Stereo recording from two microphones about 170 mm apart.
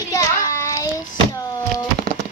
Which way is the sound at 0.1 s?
20° left (ahead or behind).